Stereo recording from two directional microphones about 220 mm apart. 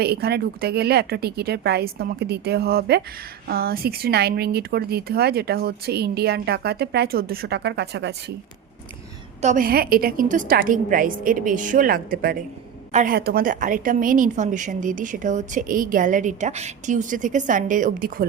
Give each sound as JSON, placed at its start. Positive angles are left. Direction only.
{"t": 0.0, "sound": "speech", "side_deg": -45}
{"t": 9.4, "sound": "a woman's voice", "side_deg": -35}